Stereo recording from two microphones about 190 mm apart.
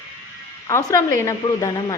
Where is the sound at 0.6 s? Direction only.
15° left (ahead or behind).